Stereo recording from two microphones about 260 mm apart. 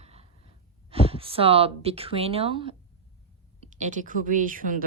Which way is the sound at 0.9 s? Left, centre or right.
Right.